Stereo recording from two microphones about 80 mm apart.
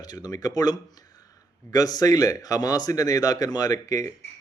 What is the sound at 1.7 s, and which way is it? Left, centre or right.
Speech, left.